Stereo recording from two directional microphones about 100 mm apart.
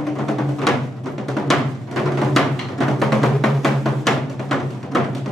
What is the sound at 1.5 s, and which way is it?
Music, centre (ahead or behind).